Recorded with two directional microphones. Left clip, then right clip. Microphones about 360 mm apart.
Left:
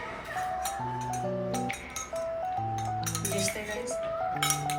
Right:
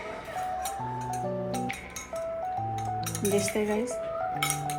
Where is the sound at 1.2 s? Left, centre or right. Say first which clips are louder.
Even; centre.